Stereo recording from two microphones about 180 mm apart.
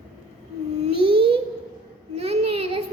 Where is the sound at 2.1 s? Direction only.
35° right (ahead or behind).